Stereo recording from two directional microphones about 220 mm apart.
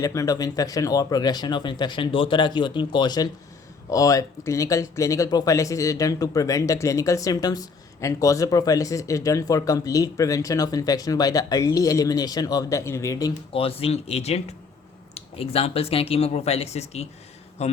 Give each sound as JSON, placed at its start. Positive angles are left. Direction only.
{"t": 0.0, "sound": "speech", "side_deg": 15}